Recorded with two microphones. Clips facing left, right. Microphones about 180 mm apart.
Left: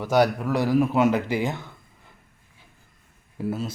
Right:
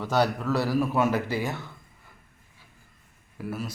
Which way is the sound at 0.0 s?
15° left (ahead or behind).